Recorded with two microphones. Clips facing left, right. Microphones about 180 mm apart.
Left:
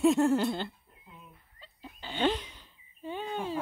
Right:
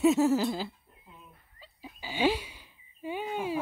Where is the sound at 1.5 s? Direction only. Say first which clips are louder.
Right 1 dB; 5° right (ahead or behind).